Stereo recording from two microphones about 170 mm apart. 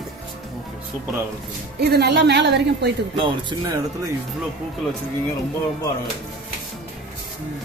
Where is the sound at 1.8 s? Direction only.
75° right (ahead or behind); by 2.9 s 90° right.